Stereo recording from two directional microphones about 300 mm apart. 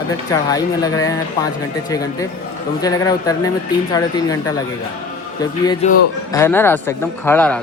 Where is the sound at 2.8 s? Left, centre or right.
Centre.